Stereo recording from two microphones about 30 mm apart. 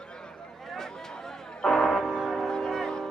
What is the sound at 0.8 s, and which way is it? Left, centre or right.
Music, centre.